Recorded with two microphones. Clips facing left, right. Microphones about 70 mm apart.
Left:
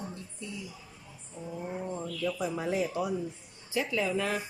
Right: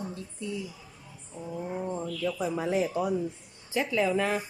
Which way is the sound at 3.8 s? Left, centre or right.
Right.